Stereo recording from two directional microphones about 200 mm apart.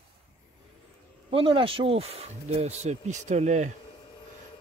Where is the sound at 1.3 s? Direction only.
25° right (ahead or behind).